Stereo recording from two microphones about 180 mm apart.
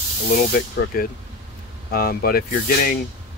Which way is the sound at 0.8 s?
60° left (ahead or behind).